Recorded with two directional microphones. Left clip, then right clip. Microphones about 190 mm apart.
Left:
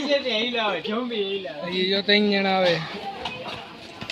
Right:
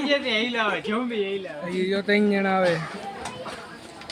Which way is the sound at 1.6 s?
15° right (ahead or behind).